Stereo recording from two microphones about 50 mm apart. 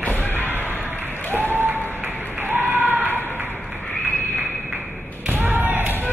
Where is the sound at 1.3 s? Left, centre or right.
Right.